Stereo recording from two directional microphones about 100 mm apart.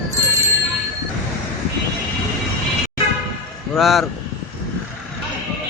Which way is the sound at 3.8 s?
Centre (ahead or behind).